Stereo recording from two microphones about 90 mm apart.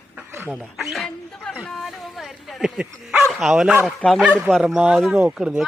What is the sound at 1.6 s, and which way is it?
Bow-wow, centre (ahead or behind).